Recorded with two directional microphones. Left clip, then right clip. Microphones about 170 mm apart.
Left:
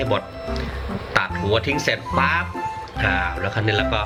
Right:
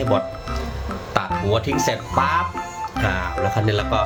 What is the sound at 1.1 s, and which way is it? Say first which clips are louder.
Music: left 1 dB; 10° right (ahead or behind).